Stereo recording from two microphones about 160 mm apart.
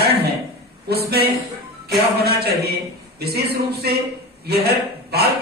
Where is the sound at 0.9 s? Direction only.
85° right.